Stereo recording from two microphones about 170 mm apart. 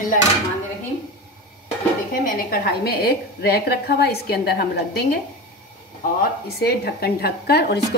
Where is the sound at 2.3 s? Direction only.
60° left (ahead or behind).